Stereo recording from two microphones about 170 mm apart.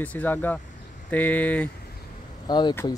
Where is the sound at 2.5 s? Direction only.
25° left (ahead or behind).